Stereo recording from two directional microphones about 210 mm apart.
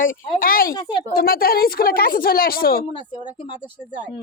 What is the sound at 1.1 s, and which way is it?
A woman's voice, 45° left (ahead or behind).